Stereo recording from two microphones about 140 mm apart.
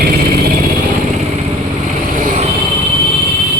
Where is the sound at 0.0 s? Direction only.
90° right.